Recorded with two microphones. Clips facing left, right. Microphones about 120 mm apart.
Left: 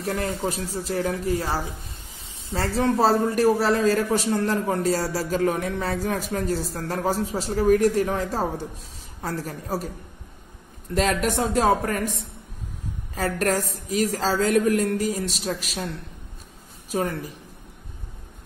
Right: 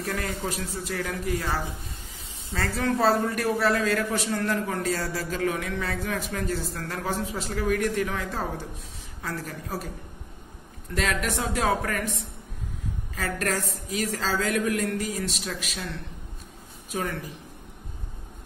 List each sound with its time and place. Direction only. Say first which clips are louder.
0.0 s speech: left 4 dB; 30° left (ahead or behind)
11.0 s speech: left 5 dB; 35° left (ahead or behind)
13.1 s speech: left 5 dB; 35° left (ahead or behind)
16.9 s speech: left 5 dB; 35° left (ahead or behind)